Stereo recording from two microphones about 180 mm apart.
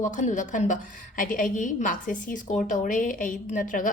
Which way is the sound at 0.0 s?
45° left (ahead or behind).